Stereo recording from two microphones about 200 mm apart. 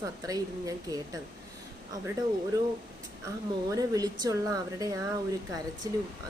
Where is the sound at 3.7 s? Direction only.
20° right (ahead or behind).